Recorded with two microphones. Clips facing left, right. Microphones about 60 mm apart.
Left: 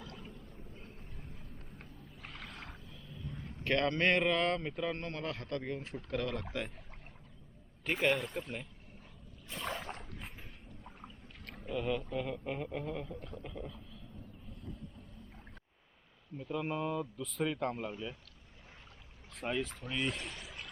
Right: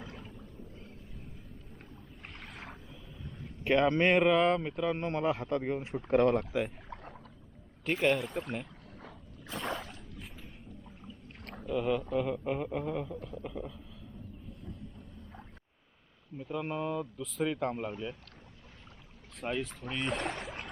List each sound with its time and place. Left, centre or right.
1.8 s boat: centre
3.6 s speech: centre
4.9 s speech: centre
7.9 s speech: centre
8.9 s a sound: right
11.7 s speech: centre
16.4 s speech: centre
19.4 s speech: centre
20.1 s a sound: right